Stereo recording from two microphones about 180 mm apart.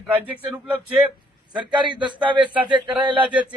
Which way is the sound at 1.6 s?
25° right (ahead or behind).